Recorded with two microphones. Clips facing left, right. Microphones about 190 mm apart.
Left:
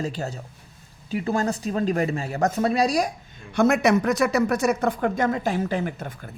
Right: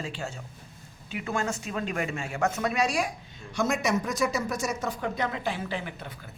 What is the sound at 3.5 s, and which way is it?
Speech, 60° left (ahead or behind).